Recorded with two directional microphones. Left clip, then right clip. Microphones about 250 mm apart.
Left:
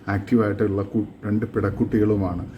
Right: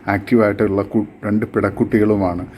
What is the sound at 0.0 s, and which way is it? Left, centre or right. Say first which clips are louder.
A man's voice: right 7 dB; centre.